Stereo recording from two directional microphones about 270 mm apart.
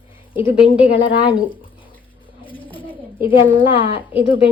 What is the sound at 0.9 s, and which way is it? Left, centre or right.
Speech, centre.